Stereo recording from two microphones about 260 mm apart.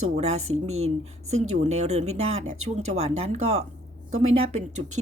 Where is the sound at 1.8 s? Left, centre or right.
Right.